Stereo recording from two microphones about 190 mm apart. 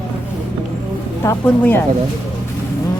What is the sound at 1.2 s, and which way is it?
Speech, 10° left (ahead or behind).